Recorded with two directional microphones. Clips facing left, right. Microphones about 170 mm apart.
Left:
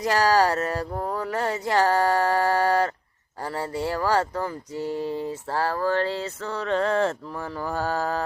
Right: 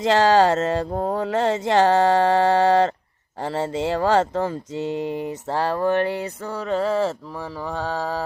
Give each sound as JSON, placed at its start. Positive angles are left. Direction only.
{"t": 0.0, "sound": "speech", "side_deg": -25}
{"t": 7.6, "sound": "mantra", "side_deg": 0}